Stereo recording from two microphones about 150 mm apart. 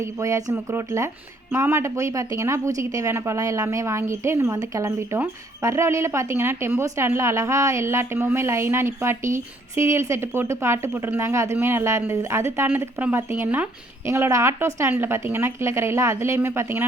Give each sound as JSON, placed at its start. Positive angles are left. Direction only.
{"t": 0.0, "sound": "a woman's voice", "side_deg": -20}